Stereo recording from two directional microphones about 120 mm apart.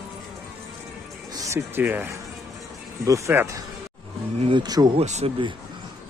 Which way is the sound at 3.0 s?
25° right (ahead or behind).